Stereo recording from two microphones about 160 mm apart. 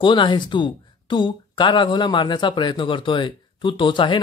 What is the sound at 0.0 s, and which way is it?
Speech, 30° left (ahead or behind).